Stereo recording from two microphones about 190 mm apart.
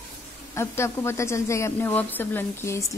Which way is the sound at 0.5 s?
15° left (ahead or behind).